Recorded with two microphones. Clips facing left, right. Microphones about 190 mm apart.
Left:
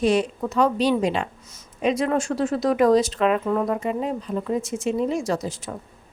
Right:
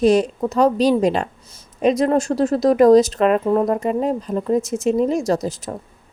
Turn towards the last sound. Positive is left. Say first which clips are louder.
# right 5 dB
turn(degrees=-40)  # may be behind; listen again after turning